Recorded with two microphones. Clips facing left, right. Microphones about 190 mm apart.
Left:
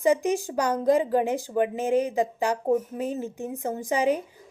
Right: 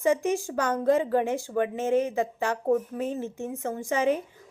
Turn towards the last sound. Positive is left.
turn(degrees=15)  # may be behind; listen again after turning